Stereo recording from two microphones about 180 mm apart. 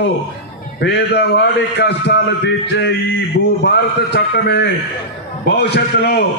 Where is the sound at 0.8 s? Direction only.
70° left (ahead or behind).